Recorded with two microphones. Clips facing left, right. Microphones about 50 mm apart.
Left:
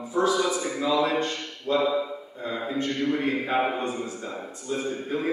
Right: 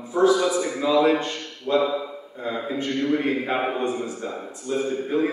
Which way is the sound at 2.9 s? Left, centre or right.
Right.